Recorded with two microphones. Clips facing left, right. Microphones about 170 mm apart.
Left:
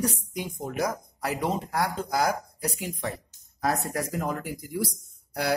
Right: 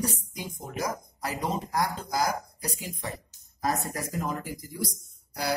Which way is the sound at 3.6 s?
65° left (ahead or behind).